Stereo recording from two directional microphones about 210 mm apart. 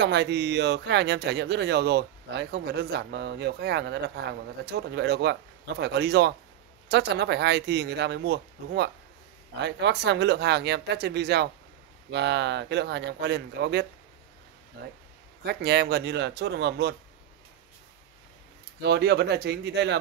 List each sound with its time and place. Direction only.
0.0 s speech: 55° right (ahead or behind)
18.8 s speech: 55° right (ahead or behind)